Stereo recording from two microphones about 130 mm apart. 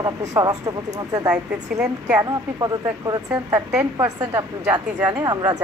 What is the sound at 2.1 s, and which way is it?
Speech, 30° right (ahead or behind).